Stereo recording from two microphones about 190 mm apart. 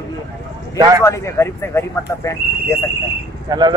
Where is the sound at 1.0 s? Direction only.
15° left (ahead or behind).